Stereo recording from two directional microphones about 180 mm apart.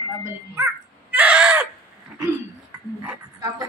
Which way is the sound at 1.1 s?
5° right (ahead or behind).